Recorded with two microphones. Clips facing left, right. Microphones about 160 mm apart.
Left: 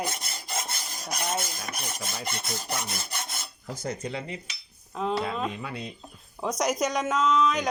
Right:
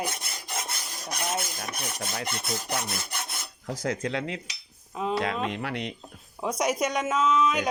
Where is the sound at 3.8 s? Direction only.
90° right.